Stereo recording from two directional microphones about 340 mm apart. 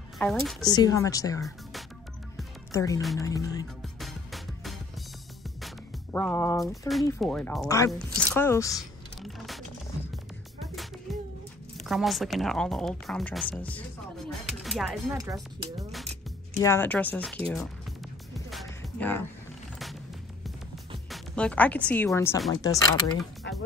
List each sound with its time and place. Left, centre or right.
0.2 s speech: centre
2.3 s music: centre
6.1 s speech: centre
8.2 s typing: centre
10.1 s music: centre
11.7 s speech: centre
15.9 s music: centre
17.5 s speech: centre
18.5 s music: centre
21.1 s speech: centre
23.5 s music: left